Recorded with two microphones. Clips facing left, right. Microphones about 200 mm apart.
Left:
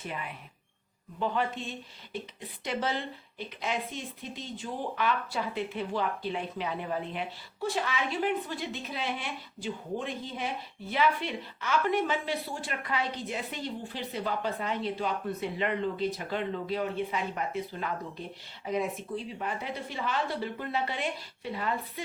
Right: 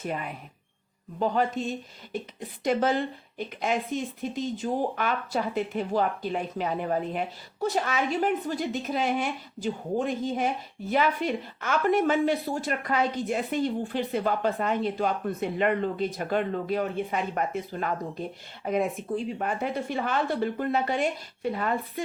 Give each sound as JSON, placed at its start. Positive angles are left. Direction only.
{"t": 0.0, "sound": "speech", "side_deg": -45}